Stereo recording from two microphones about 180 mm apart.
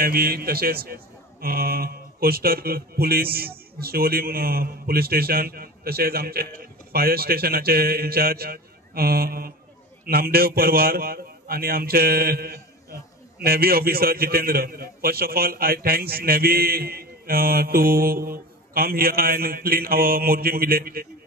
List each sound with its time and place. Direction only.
0.0 s a man's voice: 55° right (ahead or behind)